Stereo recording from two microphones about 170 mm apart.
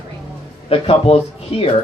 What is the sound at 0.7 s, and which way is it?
Speech, 35° left (ahead or behind).